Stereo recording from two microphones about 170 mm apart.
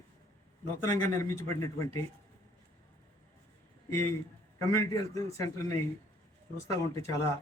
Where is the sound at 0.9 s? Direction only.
20° left (ahead or behind).